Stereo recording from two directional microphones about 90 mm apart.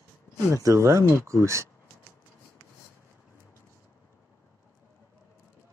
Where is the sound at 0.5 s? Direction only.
35° right (ahead or behind).